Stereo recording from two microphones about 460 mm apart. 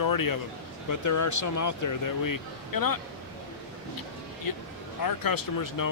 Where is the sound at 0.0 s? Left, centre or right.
Left.